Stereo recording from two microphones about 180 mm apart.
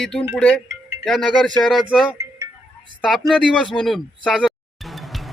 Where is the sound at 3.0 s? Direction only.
Centre (ahead or behind).